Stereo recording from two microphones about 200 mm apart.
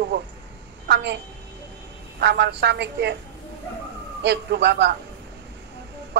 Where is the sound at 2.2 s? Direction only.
60° right (ahead or behind).